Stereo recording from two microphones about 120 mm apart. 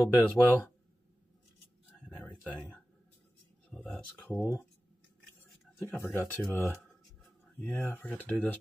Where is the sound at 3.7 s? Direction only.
5° left (ahead or behind).